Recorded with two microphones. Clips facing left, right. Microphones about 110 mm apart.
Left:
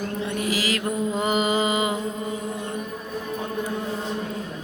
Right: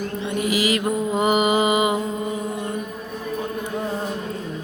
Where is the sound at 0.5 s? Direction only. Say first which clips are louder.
Right 6 dB; 15° right (ahead or behind).